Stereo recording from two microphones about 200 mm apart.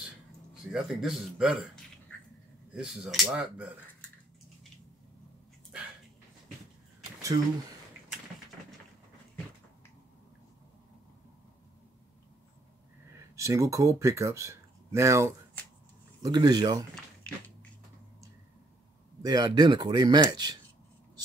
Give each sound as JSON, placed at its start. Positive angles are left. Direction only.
{"t": 0.7, "sound": "speech", "side_deg": 0}
{"t": 13.4, "sound": "speech", "side_deg": -15}
{"t": 17.3, "sound": "a sound", "side_deg": 5}
{"t": 19.2, "sound": "speech", "side_deg": -20}